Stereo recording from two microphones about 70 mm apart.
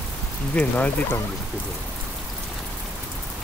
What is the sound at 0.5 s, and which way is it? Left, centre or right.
Speech, left.